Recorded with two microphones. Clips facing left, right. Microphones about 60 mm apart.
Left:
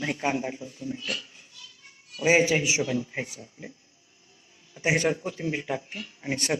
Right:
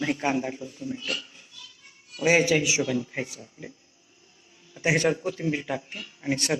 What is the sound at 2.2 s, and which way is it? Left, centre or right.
Speech, left.